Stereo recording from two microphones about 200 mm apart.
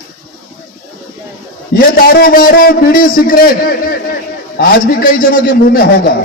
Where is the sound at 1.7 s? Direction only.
45° left (ahead or behind).